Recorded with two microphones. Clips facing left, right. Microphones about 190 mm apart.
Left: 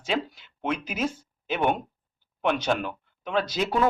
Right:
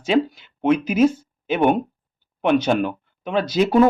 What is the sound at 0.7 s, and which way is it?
Speech, 10° right (ahead or behind).